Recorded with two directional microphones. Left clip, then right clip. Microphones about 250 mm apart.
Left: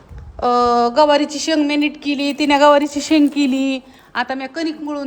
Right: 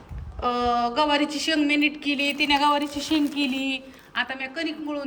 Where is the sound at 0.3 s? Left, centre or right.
Centre.